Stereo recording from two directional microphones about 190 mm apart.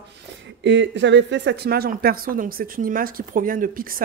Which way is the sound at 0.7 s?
70° right (ahead or behind).